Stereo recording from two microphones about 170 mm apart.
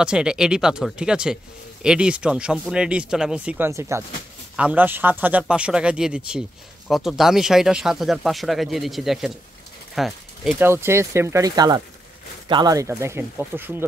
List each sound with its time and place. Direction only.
0.0 s speech: 5° right (ahead or behind)
10.6 s speech: 15° right (ahead or behind)